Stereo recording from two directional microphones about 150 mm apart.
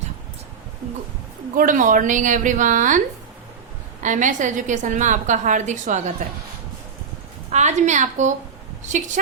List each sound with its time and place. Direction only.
1.5 s a woman's voice: 65° right (ahead or behind)
4.0 s a woman's voice: 55° right (ahead or behind)
7.5 s a woman's voice: 50° right (ahead or behind)